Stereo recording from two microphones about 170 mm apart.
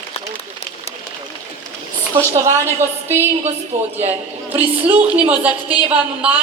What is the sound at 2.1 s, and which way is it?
A woman's voice, 15° right (ahead or behind).